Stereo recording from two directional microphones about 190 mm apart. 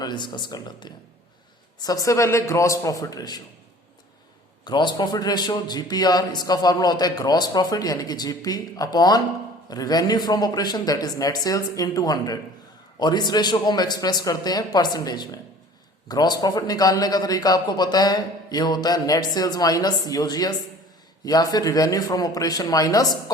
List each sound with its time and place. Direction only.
0.0 s a man's voice: 25° left (ahead or behind)
4.6 s a man's voice: 25° left (ahead or behind)